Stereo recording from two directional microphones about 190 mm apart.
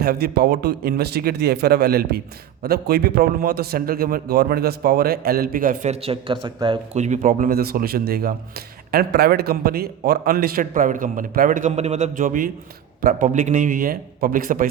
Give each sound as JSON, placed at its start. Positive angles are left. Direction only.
{"t": 0.0, "sound": "a man's voice", "side_deg": -55}
{"t": 6.9, "sound": "speech", "side_deg": -40}